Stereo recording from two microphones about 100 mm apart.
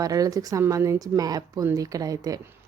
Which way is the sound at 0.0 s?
35° right (ahead or behind).